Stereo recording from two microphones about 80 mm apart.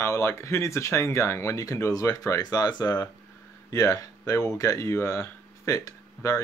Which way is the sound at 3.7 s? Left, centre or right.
Left.